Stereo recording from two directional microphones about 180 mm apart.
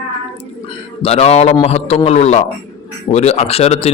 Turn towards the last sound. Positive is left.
turn(degrees=35)  # may be behind; listen again after turning